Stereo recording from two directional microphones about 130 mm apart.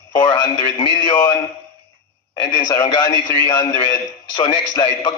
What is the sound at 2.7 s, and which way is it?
A man's voice, 30° left (ahead or behind).